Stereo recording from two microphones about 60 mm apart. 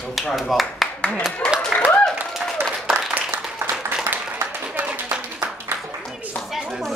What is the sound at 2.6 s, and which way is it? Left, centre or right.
Applause, right.